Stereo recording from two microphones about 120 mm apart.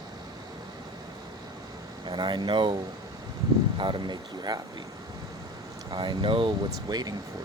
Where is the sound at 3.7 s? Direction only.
40° right (ahead or behind).